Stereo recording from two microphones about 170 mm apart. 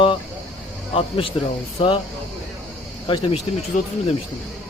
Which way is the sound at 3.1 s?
30° left (ahead or behind).